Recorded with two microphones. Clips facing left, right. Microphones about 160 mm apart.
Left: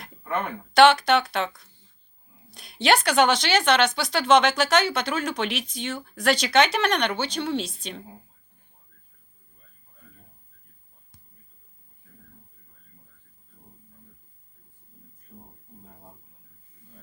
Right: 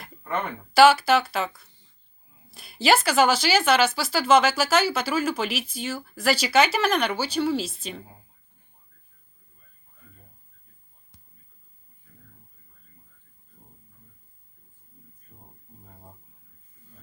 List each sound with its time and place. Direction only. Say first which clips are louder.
0.0 s speech: left 1 dB; 5° right (ahead or behind)